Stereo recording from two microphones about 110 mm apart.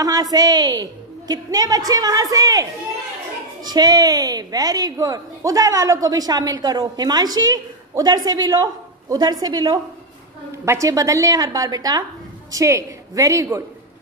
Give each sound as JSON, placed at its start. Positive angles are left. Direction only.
{"t": 0.0, "sound": "a woman's voice", "side_deg": -35}
{"t": 10.5, "sound": "a woman's voice", "side_deg": -25}